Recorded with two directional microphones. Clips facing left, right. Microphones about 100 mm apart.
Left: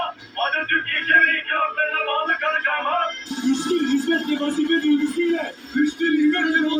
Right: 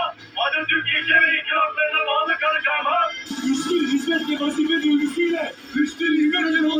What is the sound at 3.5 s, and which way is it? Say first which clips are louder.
Speech: even; 15° left (ahead or behind).